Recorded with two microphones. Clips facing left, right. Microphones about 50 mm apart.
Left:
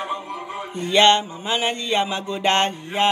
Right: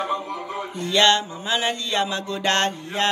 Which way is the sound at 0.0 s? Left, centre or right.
Centre.